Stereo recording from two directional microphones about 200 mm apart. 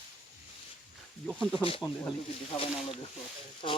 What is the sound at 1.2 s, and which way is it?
Speech, centre (ahead or behind).